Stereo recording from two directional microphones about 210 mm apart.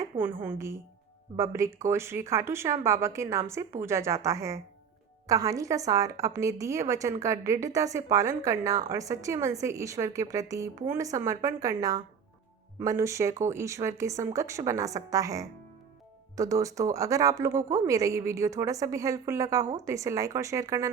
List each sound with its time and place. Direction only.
0.4 s speech: 15° right (ahead or behind)